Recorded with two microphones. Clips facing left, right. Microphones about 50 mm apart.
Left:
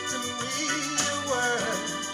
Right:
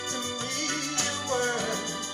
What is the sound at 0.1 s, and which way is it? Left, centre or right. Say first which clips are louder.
Music: left 1 dB; left.